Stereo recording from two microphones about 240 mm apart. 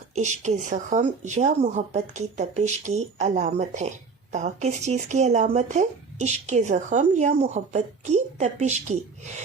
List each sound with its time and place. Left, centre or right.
0.1 s speech: right